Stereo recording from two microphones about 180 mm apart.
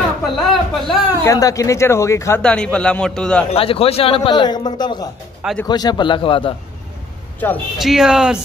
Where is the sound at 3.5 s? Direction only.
30° left (ahead or behind).